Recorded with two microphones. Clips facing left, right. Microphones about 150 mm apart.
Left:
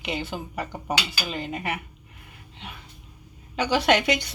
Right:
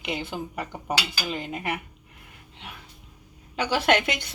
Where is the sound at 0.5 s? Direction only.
Centre (ahead or behind).